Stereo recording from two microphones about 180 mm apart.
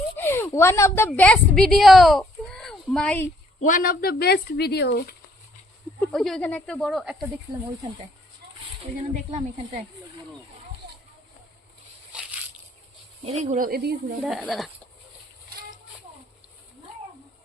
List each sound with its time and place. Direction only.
0.2 s a woman's voice: 15° left (ahead or behind)
3.6 s speech: 50° left (ahead or behind); by 5.1 s 65° left (ahead or behind)
6.0 s speech: centre (ahead or behind)
13.2 s speech: 40° right (ahead or behind)
13.7 s speech: 55° right (ahead or behind)
14.3 s speech: 5° right (ahead or behind)